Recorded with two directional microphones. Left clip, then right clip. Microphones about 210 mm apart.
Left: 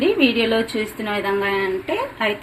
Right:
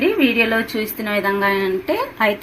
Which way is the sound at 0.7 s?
15° right (ahead or behind).